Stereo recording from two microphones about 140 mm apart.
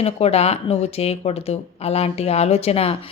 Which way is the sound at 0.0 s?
45° left (ahead or behind).